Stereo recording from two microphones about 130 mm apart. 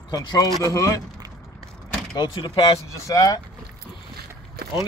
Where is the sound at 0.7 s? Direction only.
25° left (ahead or behind).